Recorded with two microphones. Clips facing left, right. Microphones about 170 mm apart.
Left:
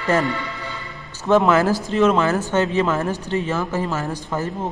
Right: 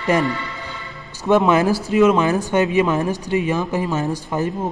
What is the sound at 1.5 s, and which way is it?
Speech, 20° right (ahead or behind).